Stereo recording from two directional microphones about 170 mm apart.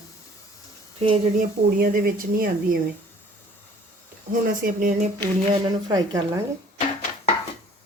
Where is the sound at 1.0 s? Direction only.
35° right (ahead or behind).